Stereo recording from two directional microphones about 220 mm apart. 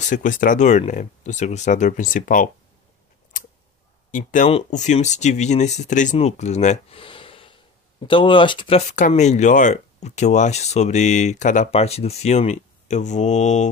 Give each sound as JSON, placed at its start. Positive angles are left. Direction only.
{"t": 0.1, "sound": "speech", "side_deg": 35}
{"t": 4.1, "sound": "speech", "side_deg": 35}